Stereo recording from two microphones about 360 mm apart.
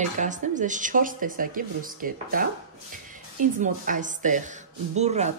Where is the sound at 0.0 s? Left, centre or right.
Right.